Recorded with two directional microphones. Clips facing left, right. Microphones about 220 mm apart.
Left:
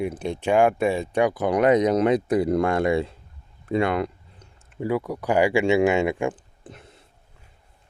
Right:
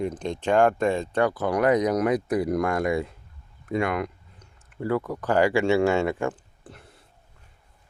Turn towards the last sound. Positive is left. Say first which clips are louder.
# left 3 dB
turn(degrees=20)  # may be behind; listen again after turning